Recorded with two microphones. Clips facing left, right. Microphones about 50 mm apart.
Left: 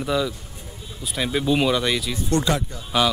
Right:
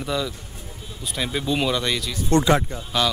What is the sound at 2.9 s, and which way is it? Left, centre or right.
Speech, centre.